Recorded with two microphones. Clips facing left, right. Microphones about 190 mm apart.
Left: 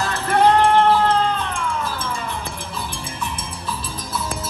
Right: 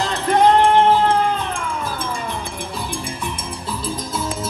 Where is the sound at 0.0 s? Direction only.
15° right (ahead or behind).